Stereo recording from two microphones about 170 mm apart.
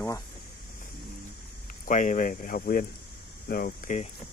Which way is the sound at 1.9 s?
50° left (ahead or behind).